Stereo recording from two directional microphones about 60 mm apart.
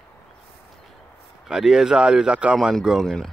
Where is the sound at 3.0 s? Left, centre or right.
Centre.